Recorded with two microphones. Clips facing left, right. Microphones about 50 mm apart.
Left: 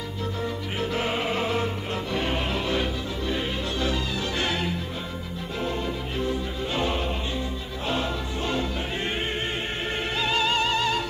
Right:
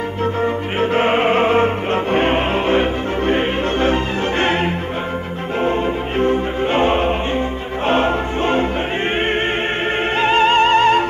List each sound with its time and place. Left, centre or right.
0.2 s music: right
10.1 s music: right